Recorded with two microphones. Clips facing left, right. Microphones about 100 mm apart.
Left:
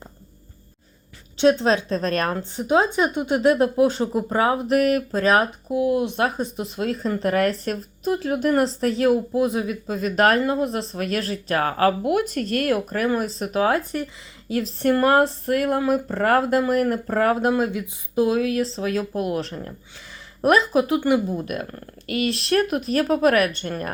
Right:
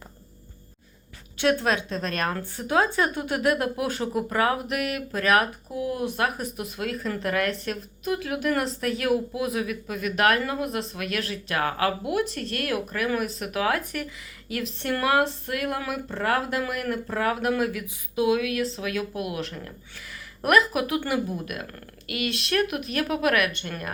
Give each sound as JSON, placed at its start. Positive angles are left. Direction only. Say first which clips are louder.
{"t": 1.4, "sound": "speech", "louder": "left 5 dB", "side_deg": 25}
{"t": 2.3, "sound": "speech", "louder": "left 4 dB", "side_deg": 20}
{"t": 4.8, "sound": "speech", "louder": "left 8 dB", "side_deg": 40}
{"t": 13.1, "sound": "speech", "louder": "left 4 dB", "side_deg": 30}
{"t": 17.5, "sound": "speech", "louder": "left 3 dB", "side_deg": 25}